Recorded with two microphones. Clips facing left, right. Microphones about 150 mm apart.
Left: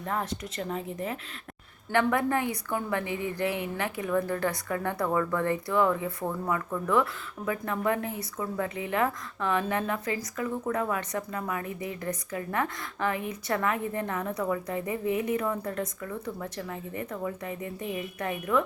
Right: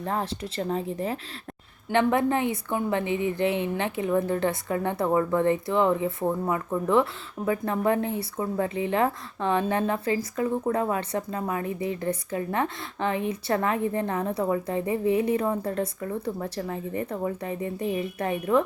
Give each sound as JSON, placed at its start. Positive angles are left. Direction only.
{"t": 0.0, "sound": "a woman's voice", "side_deg": -30}